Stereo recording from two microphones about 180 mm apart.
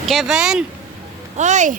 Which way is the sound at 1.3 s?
40° right (ahead or behind).